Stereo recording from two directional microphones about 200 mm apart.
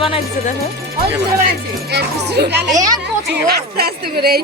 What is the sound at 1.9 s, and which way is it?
A woman's voice, 55° right (ahead or behind).